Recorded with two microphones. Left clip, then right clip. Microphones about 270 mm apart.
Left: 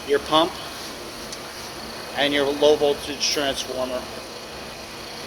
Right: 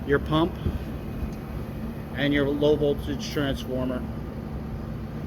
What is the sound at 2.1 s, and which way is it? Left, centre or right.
Speech, centre.